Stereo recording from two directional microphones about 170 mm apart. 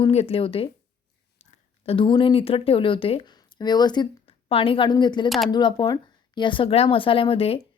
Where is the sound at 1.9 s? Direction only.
30° left (ahead or behind).